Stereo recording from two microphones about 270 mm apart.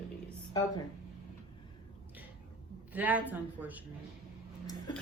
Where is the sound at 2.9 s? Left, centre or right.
Centre.